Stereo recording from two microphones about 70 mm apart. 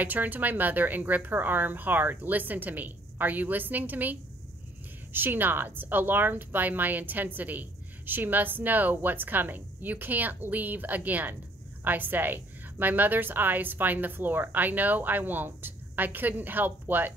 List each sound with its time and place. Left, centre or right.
0.0 s a woman's voice: right